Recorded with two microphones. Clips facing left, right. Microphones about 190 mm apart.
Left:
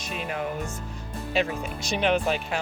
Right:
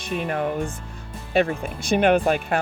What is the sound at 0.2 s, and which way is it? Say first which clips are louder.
Speech: right 5 dB; 55° right (ahead or behind).